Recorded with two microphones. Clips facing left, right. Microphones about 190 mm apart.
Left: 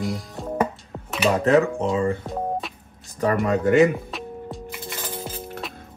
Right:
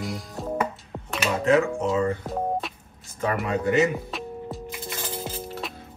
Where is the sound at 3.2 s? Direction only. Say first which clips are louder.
Left 4 dB; 45° left (ahead or behind).